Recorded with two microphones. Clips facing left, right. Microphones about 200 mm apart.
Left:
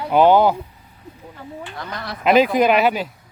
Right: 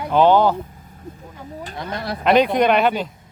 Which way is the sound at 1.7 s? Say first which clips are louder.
Right 6 dB; 20° right (ahead or behind).